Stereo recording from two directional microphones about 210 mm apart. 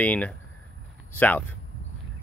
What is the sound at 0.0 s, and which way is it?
Speech, 5° left (ahead or behind).